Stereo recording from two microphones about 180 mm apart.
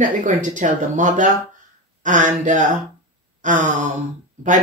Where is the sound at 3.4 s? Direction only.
45° right (ahead or behind).